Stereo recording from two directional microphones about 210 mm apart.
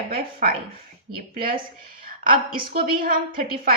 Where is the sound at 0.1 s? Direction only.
45° right (ahead or behind).